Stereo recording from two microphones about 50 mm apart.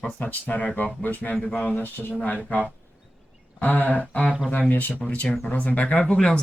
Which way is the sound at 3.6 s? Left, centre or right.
Left.